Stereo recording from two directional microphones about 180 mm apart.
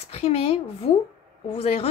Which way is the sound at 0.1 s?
35° left (ahead or behind).